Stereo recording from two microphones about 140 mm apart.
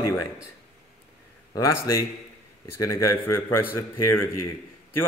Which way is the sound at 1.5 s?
25° left (ahead or behind).